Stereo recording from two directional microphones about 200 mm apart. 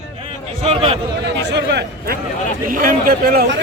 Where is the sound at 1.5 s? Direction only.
55° right (ahead or behind).